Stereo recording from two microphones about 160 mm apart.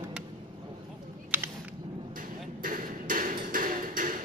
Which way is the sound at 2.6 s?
60° right (ahead or behind).